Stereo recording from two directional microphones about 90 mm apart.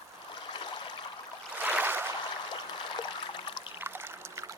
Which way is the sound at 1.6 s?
20° right (ahead or behind).